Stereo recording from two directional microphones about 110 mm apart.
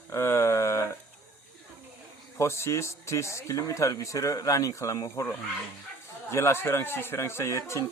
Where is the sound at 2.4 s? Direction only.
25° left (ahead or behind).